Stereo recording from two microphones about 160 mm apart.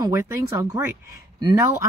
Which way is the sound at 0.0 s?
15° right (ahead or behind).